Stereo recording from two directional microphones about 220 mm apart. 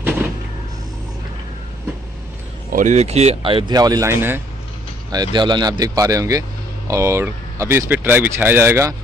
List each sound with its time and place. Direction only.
2.7 s speech: 35° right (ahead or behind); by 8.9 s 10° right (ahead or behind)